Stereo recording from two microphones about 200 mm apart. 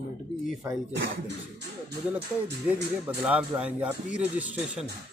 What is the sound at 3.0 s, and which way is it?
Speech, 5° right (ahead or behind).